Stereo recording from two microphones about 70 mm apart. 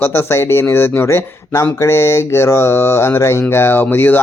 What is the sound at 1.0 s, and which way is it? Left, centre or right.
A man's voice, left.